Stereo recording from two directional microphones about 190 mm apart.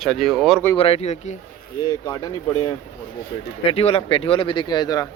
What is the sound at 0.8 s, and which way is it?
Speech, 30° left (ahead or behind).